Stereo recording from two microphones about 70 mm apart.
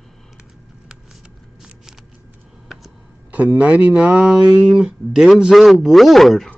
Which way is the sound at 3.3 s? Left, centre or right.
Right.